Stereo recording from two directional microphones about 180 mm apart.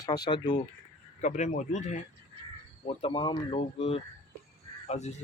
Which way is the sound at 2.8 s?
30° left (ahead or behind).